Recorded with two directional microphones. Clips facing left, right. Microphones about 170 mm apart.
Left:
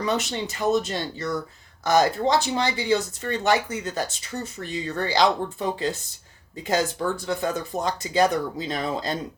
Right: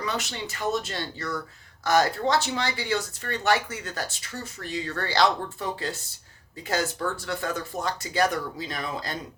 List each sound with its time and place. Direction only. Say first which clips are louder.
0.0 s speech: left 5 dB; 25° left (ahead or behind)
7.3 s speech: left 4 dB; 20° left (ahead or behind)